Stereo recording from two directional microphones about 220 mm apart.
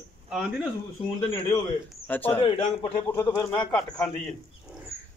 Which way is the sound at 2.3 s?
25° left (ahead or behind).